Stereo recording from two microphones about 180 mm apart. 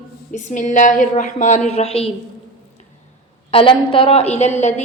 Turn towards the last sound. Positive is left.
turn(degrees=35)  # may be behind; listen again after turning